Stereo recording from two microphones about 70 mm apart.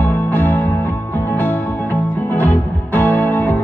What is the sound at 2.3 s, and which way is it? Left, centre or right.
Music, left.